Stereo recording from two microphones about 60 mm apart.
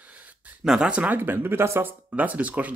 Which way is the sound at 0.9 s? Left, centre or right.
Right.